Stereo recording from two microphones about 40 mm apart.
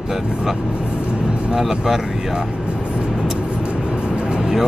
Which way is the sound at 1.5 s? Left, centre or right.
Centre.